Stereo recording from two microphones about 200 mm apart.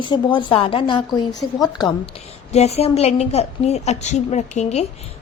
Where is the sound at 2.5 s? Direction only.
30° left (ahead or behind).